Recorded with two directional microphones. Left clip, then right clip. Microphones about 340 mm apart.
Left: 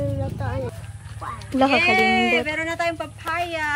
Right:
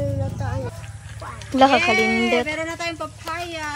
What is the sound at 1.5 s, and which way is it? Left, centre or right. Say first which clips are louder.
Speech: right 2 dB; centre.